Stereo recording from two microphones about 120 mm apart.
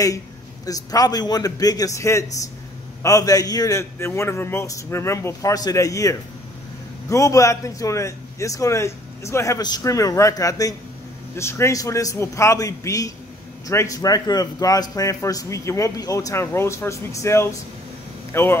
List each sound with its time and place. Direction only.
0.7 s a man's voice: 30° left (ahead or behind)